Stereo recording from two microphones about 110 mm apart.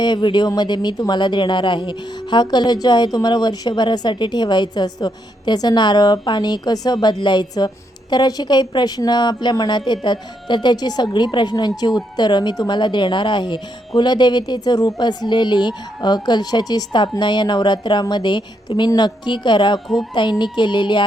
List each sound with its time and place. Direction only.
0.0 s speech: 40° left (ahead or behind)